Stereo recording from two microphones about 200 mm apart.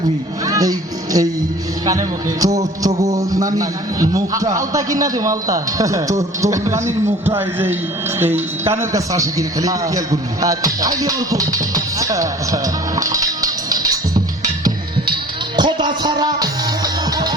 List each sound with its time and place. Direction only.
0.4 s music: 15° right (ahead or behind)
1.8 s a man's voice: 15° right (ahead or behind)
14.6 s music: 25° right (ahead or behind)